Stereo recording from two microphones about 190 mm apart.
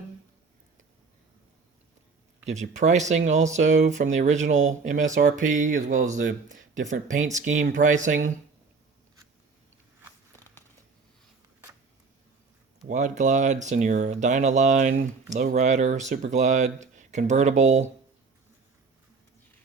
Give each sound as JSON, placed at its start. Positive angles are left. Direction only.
{"t": 2.5, "sound": "speech", "side_deg": -40}
{"t": 12.9, "sound": "speech", "side_deg": -40}